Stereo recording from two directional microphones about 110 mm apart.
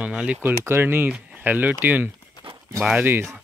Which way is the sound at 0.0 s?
10° right (ahead or behind).